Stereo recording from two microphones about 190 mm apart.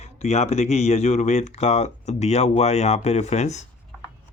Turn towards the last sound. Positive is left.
turn(degrees=35)  # may be behind; listen again after turning